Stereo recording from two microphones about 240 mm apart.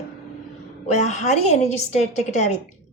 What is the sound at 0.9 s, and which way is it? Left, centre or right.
A woman's voice, left.